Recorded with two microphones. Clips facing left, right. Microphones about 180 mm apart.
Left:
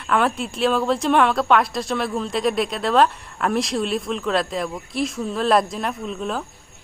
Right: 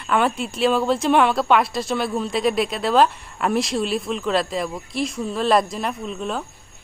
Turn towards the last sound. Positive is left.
turn(degrees=0)  # may be behind; listen again after turning